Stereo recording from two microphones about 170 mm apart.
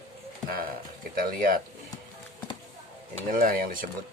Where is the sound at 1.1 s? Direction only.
55° right (ahead or behind).